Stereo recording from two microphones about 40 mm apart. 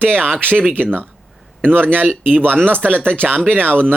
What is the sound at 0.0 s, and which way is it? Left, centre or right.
Speech, right.